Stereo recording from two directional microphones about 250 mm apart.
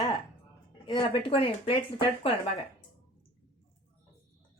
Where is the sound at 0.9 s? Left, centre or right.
Centre.